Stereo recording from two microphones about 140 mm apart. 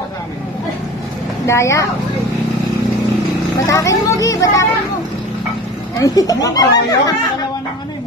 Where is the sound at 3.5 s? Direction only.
20° left (ahead or behind).